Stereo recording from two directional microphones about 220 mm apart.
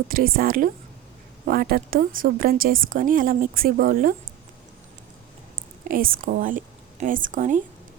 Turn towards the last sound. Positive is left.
turn(degrees=-35)  # may be behind; listen again after turning